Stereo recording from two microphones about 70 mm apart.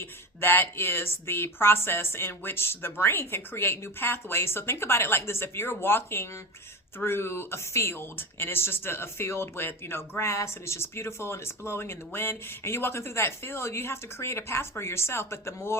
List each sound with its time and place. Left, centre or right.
0.0 s speech: left